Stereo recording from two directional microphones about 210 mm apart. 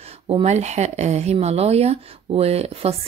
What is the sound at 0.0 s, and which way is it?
A woman's voice, 30° right (ahead or behind).